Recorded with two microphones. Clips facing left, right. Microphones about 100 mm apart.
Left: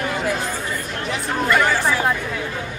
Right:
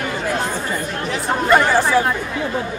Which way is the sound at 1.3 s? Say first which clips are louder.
Right 4 dB; 30° right (ahead or behind).